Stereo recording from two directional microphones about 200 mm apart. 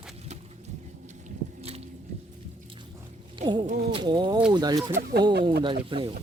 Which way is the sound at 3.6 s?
25° right (ahead or behind).